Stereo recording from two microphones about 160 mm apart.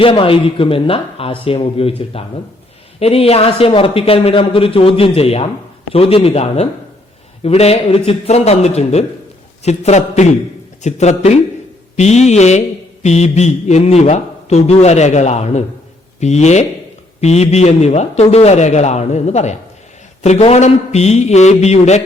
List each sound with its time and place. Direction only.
0.0 s speech: 35° left (ahead or behind)
9.6 s mantra: 45° left (ahead or behind)